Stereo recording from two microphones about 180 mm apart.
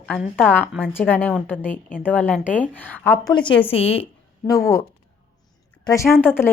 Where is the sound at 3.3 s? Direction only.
25° left (ahead or behind).